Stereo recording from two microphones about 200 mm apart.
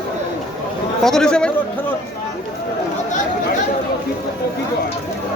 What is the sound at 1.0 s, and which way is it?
Speech, 5° left (ahead or behind).